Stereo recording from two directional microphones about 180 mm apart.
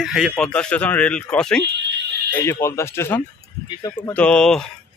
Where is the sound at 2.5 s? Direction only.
15° left (ahead or behind).